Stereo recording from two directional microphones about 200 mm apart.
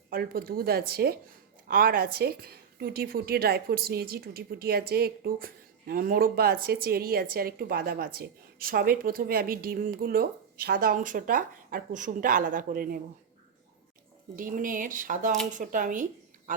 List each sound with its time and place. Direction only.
0.1 s a woman's voice: 45° right (ahead or behind)
14.3 s a woman's voice: 45° right (ahead or behind)